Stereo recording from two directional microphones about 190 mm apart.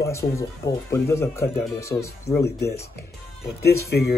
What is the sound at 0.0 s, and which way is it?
Speech, 15° left (ahead or behind).